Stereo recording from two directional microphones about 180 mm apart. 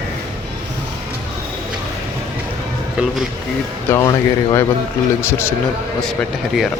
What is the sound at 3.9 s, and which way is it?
Speech, 15° left (ahead or behind).